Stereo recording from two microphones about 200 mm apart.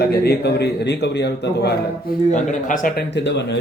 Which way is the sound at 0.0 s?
50° left (ahead or behind).